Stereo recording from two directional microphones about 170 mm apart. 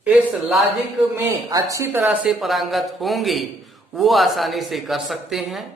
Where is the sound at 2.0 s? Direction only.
5° right (ahead or behind).